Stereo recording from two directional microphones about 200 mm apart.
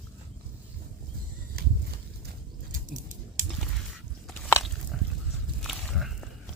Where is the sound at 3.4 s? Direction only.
40° right (ahead or behind).